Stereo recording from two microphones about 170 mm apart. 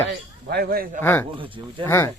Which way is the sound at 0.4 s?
65° right (ahead or behind).